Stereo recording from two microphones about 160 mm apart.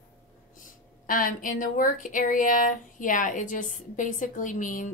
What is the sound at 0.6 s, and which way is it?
Speech, 60° left (ahead or behind).